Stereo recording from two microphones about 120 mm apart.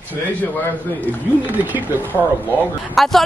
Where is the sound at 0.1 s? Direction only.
15° left (ahead or behind).